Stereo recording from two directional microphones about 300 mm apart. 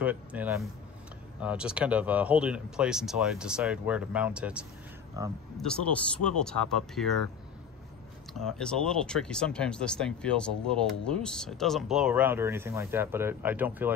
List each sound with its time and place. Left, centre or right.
0.0 s a sound: centre
1.4 s speech: centre
5.6 s speech: centre
8.3 s speech: centre